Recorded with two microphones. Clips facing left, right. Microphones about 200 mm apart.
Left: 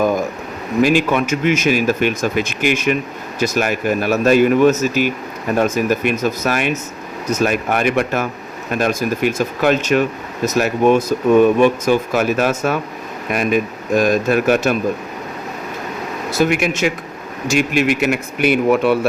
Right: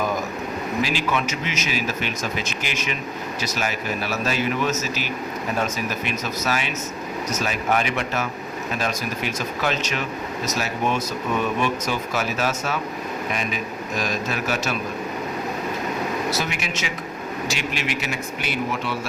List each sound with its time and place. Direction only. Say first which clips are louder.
0.8 s a man's voice: left 11 dB; 55° left (ahead or behind)
16.3 s a man's voice: left 10 dB; 55° left (ahead or behind)